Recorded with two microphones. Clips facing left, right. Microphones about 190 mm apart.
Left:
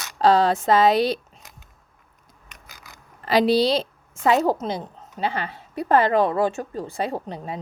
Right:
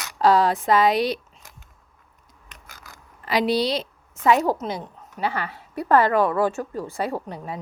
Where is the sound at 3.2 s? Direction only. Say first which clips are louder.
Left 3 dB; 30° left (ahead or behind).